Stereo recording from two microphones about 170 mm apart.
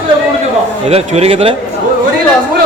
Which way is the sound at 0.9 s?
35° right (ahead or behind).